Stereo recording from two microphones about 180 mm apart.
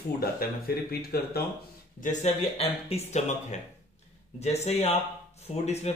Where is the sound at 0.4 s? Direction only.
55° left (ahead or behind).